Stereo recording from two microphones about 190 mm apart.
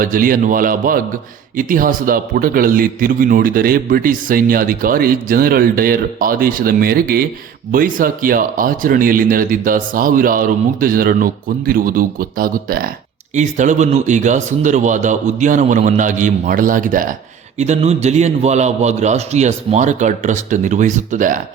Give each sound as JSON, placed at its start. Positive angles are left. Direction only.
{"t": 0.0, "sound": "a man's voice", "side_deg": -45}
{"t": 13.3, "sound": "a man's voice", "side_deg": -40}